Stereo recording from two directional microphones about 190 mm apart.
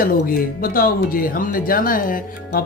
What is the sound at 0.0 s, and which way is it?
Speech, 50° left (ahead or behind).